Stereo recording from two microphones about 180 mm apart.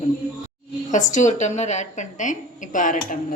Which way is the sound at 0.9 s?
45° left (ahead or behind).